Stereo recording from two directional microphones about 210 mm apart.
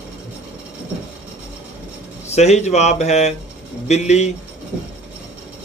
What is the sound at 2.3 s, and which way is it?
Speech, 30° left (ahead or behind).